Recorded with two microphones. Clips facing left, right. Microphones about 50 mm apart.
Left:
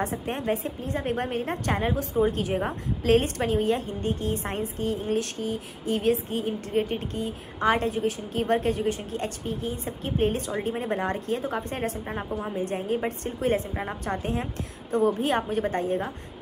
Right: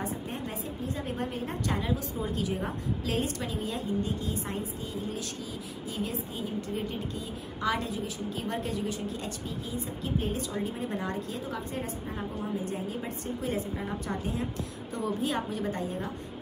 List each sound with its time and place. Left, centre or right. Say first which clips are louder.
0.0 s a woman's voice: left 6 dB; left